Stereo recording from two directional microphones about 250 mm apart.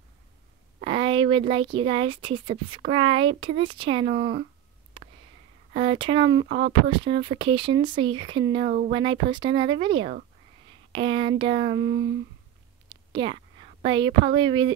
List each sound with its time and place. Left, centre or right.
0.7 s speech: right
5.0 s sniff: centre
5.7 s speech: right
12.8 s a sound: centre